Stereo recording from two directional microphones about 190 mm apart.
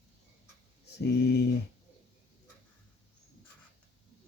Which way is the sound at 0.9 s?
60° left (ahead or behind).